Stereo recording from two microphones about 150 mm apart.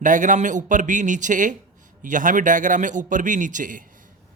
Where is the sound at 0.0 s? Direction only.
60° right (ahead or behind).